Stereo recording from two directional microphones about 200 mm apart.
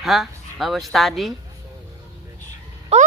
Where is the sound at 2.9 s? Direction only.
30° right (ahead or behind).